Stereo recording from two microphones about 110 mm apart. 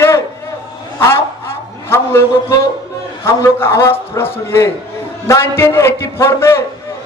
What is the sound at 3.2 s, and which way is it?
Speech, 25° left (ahead or behind).